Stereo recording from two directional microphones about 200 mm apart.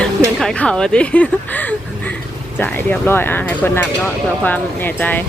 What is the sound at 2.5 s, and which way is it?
Speech, 10° left (ahead or behind).